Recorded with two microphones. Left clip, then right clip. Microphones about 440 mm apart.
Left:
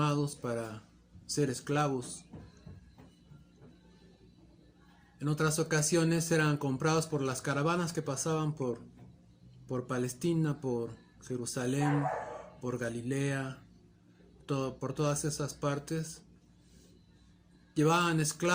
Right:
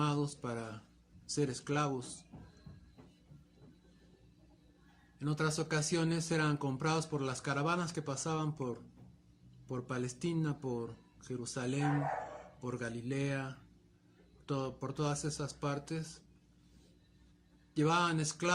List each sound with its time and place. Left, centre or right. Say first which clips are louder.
0.0 s speech: left 3 dB; right
5.2 s speech: left 4 dB; right
17.7 s speech: left 3 dB; right